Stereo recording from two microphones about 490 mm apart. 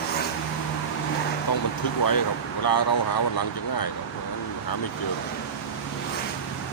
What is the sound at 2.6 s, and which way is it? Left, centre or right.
Speech, left.